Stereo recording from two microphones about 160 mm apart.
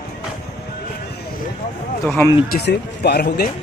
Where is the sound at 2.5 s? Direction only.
90° left.